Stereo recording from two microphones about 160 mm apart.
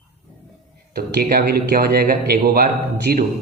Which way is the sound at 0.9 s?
70° right (ahead or behind).